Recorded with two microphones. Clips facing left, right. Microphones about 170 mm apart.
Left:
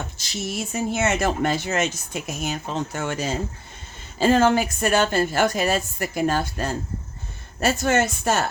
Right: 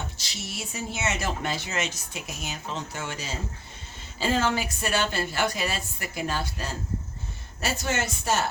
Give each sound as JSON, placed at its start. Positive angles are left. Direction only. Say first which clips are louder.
{"t": 0.2, "sound": "speech", "louder": "left 8 dB", "side_deg": 45}